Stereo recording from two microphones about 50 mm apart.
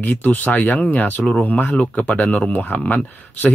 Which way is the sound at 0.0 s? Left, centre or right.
Left.